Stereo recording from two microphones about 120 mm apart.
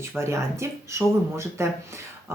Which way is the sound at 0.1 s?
20° right (ahead or behind).